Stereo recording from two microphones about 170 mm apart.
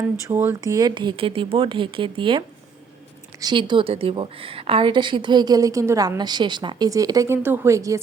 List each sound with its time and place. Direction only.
0.3 s a woman's voice: 15° right (ahead or behind); by 2.4 s 30° right (ahead or behind)
3.4 s a woman's voice: 30° right (ahead or behind)